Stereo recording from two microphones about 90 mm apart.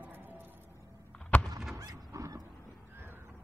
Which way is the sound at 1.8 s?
40° right (ahead or behind).